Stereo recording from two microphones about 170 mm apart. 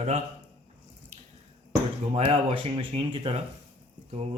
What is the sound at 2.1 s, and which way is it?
Speech, 30° right (ahead or behind).